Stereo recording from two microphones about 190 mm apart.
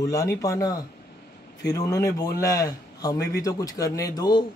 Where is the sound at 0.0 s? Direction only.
15° left (ahead or behind).